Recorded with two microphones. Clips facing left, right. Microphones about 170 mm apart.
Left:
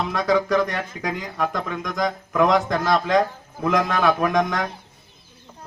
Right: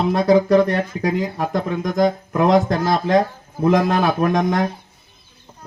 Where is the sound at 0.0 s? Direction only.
35° right (ahead or behind).